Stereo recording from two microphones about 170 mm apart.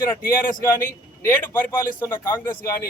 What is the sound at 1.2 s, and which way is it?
A man's voice, 10° left (ahead or behind).